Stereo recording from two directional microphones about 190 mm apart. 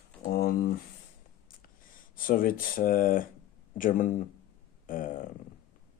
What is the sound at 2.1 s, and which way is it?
Speech, 50° left (ahead or behind).